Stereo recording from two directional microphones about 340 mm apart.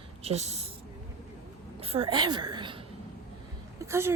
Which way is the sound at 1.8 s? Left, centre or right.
Centre.